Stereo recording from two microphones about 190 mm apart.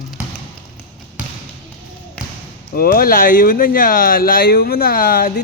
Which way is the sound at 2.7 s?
50° left (ahead or behind).